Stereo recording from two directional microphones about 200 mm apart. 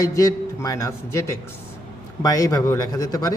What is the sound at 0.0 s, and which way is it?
A man's voice, 15° left (ahead or behind).